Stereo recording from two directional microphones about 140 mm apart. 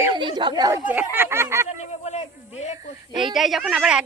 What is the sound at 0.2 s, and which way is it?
Speech, 35° right (ahead or behind).